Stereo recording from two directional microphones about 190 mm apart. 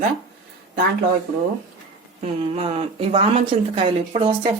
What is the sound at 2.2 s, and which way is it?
A woman's voice, 35° right (ahead or behind).